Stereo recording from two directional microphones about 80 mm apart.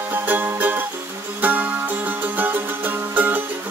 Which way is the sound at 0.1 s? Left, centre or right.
Right.